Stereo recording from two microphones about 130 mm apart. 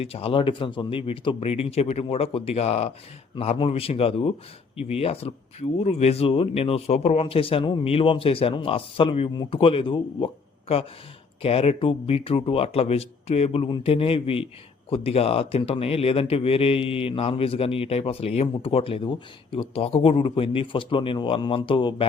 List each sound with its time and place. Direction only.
0.0 s speech: 50° left (ahead or behind)
11.4 s speech: 50° left (ahead or behind)